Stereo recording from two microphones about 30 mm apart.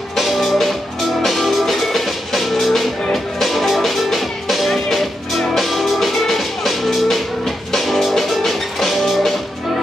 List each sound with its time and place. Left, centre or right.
0.1 s music: centre